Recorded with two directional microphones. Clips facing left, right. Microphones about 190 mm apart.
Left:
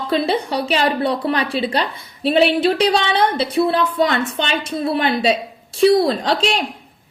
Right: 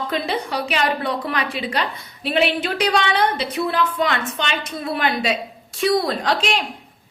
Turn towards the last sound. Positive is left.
turn(degrees=30)  # may be behind; listen again after turning